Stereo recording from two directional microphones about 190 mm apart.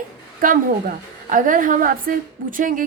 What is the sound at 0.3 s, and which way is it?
A woman's voice, 45° right (ahead or behind).